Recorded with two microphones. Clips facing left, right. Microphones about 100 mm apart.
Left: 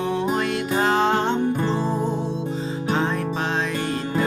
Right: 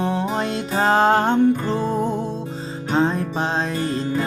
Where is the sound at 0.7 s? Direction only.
40° right (ahead or behind).